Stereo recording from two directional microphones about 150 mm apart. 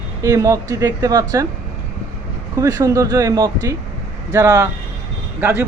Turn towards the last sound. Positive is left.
turn(degrees=-15)  # may be behind; listen again after turning